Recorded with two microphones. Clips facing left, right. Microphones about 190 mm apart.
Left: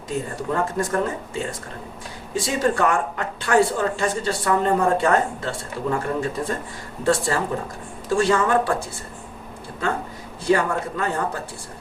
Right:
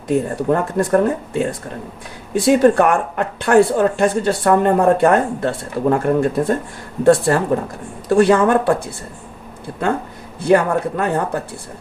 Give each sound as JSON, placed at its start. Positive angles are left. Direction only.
{"t": 0.1, "sound": "speech", "side_deg": -60}
{"t": 10.4, "sound": "speech", "side_deg": -60}